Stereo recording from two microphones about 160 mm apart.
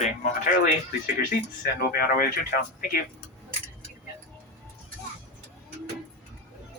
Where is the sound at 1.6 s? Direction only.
65° left (ahead or behind).